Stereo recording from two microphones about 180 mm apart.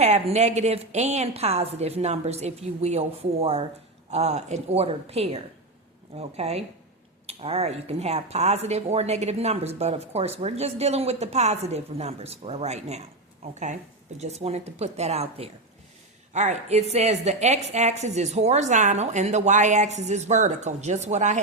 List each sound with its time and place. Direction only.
0.0 s speech: 35° right (ahead or behind)